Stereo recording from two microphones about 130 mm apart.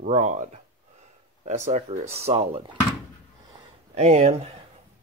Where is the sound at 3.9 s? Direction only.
60° right (ahead or behind).